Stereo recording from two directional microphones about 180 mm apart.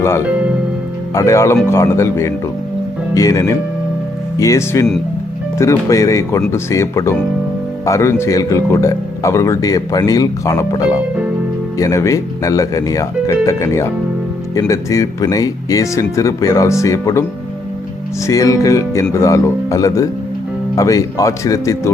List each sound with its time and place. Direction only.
1.1 s speech: 15° left (ahead or behind)
18.3 s speech: 20° left (ahead or behind)